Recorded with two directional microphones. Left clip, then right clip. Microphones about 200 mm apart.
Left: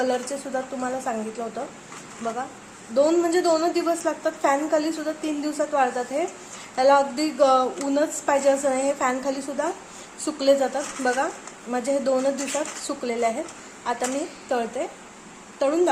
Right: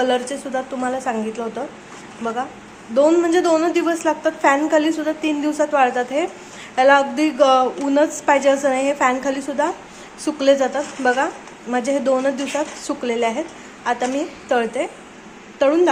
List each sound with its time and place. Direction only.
0.0 s a woman's voice: centre (ahead or behind)
14.5 s a woman's voice: centre (ahead or behind)